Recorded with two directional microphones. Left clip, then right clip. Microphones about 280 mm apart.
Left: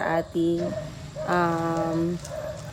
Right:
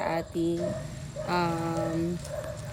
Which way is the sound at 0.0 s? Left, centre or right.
Centre.